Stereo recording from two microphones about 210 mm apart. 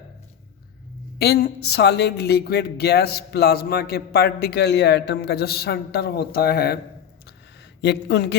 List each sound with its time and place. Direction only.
1.2 s speech: 50° left (ahead or behind)
7.8 s speech: 50° left (ahead or behind)